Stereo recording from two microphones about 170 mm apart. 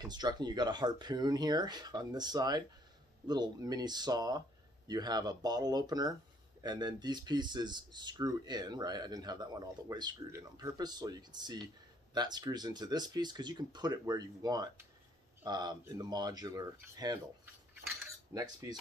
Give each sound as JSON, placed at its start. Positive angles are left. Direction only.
{"t": 0.0, "sound": "speech", "side_deg": -25}
{"t": 18.3, "sound": "speech", "side_deg": -20}